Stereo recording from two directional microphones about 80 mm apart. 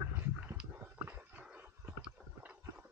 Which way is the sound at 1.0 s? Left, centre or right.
Right.